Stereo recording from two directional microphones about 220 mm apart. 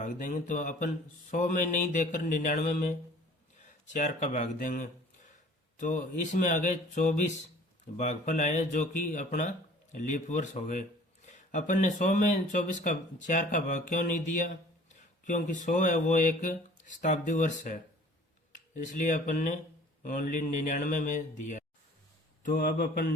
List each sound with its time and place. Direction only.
0.0 s speech: 35° left (ahead or behind)